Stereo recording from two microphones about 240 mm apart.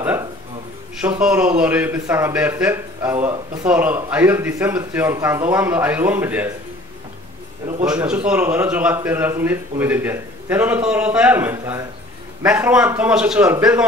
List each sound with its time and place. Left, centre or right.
0.0 s a sound: centre
0.9 s speech: centre
7.8 s a man's voice: centre